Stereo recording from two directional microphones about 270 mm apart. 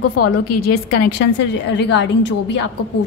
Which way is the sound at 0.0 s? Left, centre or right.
Left.